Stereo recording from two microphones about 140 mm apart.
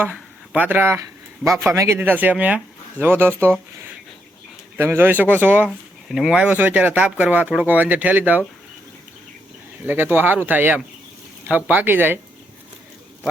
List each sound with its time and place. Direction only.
0.0 s a man's voice: 10° right (ahead or behind)
4.8 s speech: 15° right (ahead or behind)
9.8 s speech: 15° right (ahead or behind)